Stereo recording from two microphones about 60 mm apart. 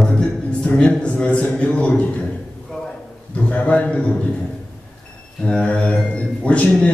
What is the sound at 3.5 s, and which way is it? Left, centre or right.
Speech, left.